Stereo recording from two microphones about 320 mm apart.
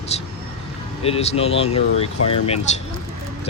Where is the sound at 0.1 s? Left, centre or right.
Centre.